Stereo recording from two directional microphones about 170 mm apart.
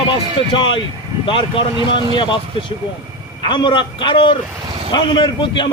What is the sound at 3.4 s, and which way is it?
A man's voice, 30° left (ahead or behind).